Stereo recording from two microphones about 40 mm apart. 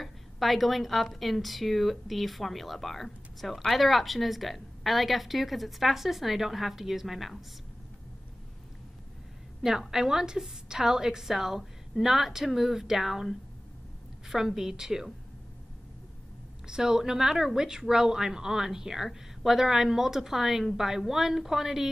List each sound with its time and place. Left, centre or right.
0.0 s a woman's voice: centre
9.6 s speech: centre
16.6 s speech: centre